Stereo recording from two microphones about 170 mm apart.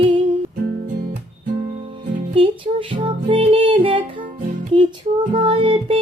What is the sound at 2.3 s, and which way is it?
Music, 30° right (ahead or behind).